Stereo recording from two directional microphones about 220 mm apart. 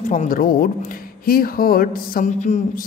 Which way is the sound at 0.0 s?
35° left (ahead or behind).